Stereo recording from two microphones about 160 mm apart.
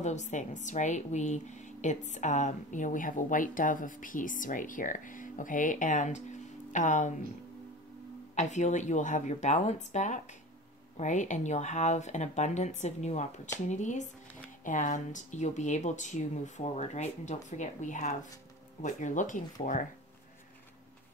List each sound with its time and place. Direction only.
0.0 s a woman's voice: 45° left (ahead or behind)
8.4 s a woman's voice: 50° left (ahead or behind)